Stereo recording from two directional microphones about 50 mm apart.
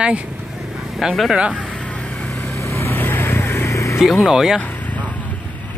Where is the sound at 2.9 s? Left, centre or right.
Left.